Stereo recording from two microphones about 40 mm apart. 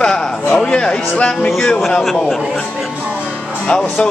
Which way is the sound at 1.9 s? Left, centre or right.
Centre.